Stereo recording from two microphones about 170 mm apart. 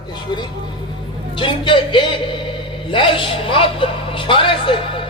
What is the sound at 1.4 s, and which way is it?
A woman's voice, 30° left (ahead or behind).